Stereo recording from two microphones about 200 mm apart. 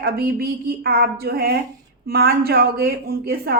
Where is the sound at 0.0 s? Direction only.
50° right (ahead or behind).